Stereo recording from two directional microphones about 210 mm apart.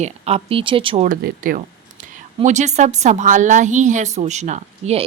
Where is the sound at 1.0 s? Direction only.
40° right (ahead or behind).